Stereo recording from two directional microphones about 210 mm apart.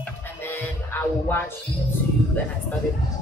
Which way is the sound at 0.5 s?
10° left (ahead or behind).